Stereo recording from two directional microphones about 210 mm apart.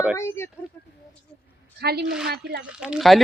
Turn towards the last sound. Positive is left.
turn(degrees=0)  # may be behind; listen again after turning